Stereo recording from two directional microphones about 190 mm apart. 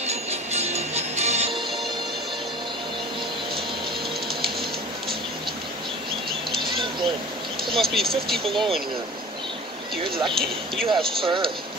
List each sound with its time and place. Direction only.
0.0 s music: 35° right (ahead or behind)
6.7 s a sound: 25° right (ahead or behind)
7.7 s speech: centre (ahead or behind)
10.4 s speech: centre (ahead or behind)
11.2 s speech: 25° right (ahead or behind)